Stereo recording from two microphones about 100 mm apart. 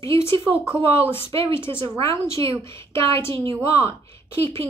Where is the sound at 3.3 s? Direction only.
65° right (ahead or behind).